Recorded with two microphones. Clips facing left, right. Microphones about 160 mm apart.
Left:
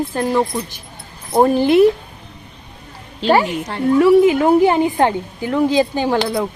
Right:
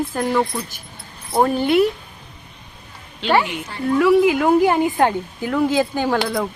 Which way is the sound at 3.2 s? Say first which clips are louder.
Left 4 dB; 35° left (ahead or behind).